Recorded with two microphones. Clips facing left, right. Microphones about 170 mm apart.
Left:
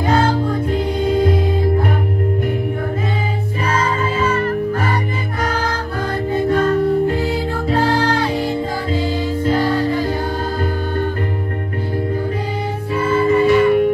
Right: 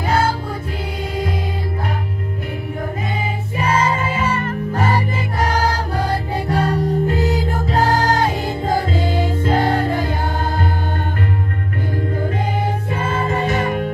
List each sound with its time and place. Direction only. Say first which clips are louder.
6.5 s music: left 3 dB; 35° right (ahead or behind); by 10.0 s 55° right (ahead or behind)
13.3 s music: left 10 dB; 45° right (ahead or behind)